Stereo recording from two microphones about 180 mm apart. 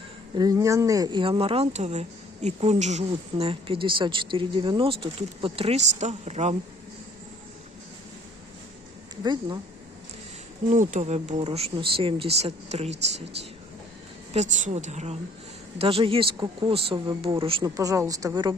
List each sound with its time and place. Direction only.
0.3 s speech: 20° right (ahead or behind); by 6.6 s 40° right (ahead or behind)
9.2 s speech: 25° right (ahead or behind)
10.7 s speech: 40° right (ahead or behind)
14.3 s speech: 45° right (ahead or behind); by 18.5 s 20° right (ahead or behind)